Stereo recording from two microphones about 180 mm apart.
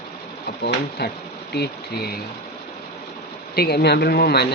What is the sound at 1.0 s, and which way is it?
Speech, 65° left (ahead or behind).